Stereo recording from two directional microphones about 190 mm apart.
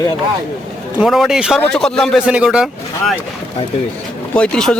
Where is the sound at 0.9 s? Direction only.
Centre (ahead or behind).